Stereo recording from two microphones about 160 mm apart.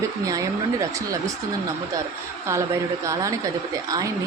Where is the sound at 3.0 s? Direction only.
20° right (ahead or behind).